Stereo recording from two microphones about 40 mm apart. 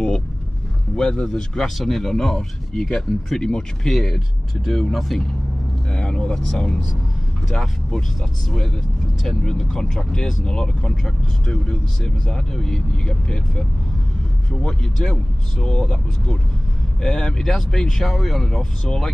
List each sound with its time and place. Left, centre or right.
0.9 s speech: centre
5.9 s vehicle: centre
6.3 s speech: centre